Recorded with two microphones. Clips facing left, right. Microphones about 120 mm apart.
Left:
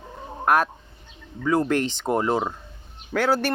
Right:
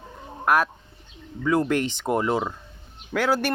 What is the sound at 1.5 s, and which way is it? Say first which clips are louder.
Speech: even; 35° left (ahead or behind).